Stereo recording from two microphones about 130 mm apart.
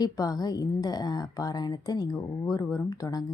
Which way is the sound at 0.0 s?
30° left (ahead or behind).